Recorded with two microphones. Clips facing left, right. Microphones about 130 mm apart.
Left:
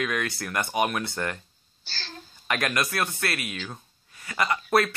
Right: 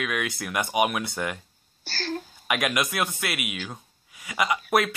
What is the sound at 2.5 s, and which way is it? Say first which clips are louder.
Speech: right 1 dB; 10° right (ahead or behind).